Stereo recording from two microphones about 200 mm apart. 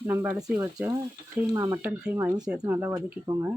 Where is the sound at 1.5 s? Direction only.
15° right (ahead or behind).